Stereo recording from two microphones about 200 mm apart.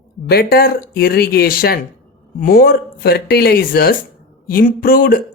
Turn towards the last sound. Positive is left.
turn(degrees=45)  # may be behind; listen again after turning